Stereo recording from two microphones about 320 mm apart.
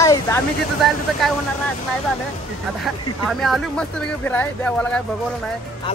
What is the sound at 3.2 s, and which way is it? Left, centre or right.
Speech, centre.